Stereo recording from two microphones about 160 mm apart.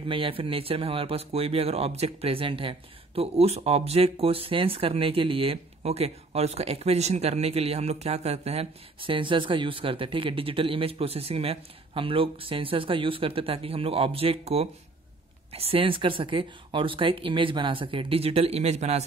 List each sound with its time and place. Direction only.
0.1 s speech: 35° right (ahead or behind)